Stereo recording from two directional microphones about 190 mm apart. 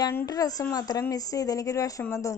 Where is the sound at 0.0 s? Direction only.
15° left (ahead or behind).